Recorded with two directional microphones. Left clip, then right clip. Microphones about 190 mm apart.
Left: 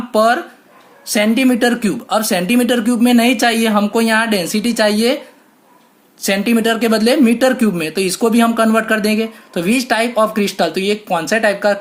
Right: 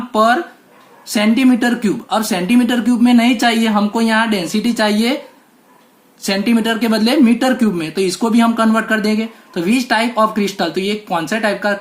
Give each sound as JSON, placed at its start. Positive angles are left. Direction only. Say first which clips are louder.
{"t": 0.1, "sound": "speech", "louder": "even", "side_deg": 40}
{"t": 6.2, "sound": "speech", "louder": "left 2 dB", "side_deg": 40}